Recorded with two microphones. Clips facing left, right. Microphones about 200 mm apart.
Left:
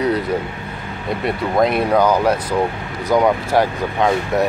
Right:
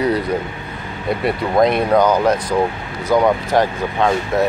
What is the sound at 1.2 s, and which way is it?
Speech, 5° left (ahead or behind).